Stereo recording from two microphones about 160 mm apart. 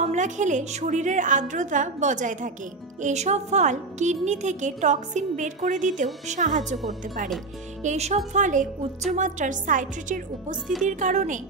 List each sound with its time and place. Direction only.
0.0 s speech: 50° right (ahead or behind)
7.8 s speech: 45° right (ahead or behind)